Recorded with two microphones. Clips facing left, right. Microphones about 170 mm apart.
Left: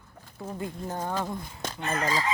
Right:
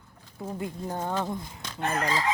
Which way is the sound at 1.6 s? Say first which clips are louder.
Left 6 dB; 50° left (ahead or behind).